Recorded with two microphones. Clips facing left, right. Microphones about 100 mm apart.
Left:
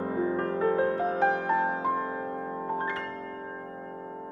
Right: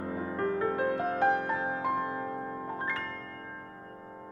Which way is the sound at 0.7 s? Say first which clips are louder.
Left 3 dB; 25° left (ahead or behind).